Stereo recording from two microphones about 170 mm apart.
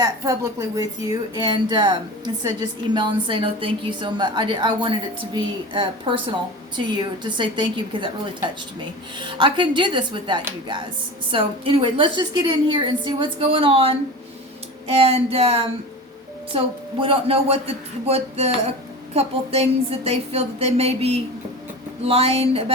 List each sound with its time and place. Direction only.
0.0 s a woman's voice: 20° right (ahead or behind); by 22.7 s 35° right (ahead or behind)